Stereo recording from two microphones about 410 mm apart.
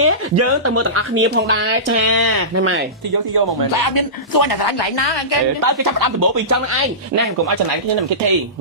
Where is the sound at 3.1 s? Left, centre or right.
Right.